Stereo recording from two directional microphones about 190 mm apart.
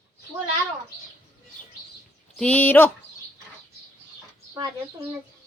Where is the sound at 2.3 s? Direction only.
5° left (ahead or behind).